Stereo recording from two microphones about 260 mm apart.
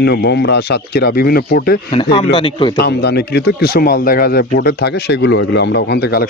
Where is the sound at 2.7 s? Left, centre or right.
Left.